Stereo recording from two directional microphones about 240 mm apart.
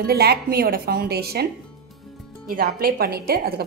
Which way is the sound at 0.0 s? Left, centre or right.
Right.